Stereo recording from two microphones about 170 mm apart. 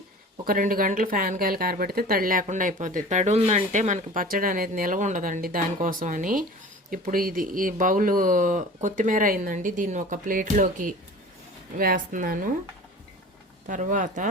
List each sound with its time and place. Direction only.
0.4 s speech: 55° right (ahead or behind)
13.7 s speech: 50° right (ahead or behind)